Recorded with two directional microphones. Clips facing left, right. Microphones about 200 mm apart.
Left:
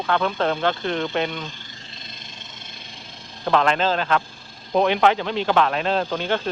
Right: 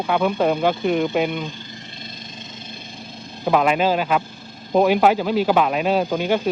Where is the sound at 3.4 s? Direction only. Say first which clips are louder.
Right 2 dB; 10° right (ahead or behind).